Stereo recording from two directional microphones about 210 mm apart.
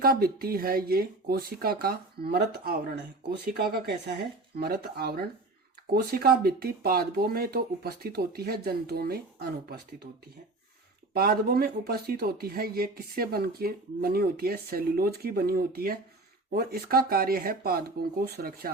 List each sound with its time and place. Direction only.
0.0 s speech: 45° right (ahead or behind)
11.1 s speech: 45° right (ahead or behind)